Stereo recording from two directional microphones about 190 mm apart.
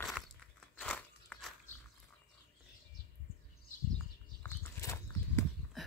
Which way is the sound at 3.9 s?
10° left (ahead or behind).